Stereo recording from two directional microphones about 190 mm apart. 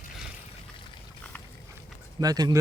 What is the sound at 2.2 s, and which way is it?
Speech, 20° right (ahead or behind).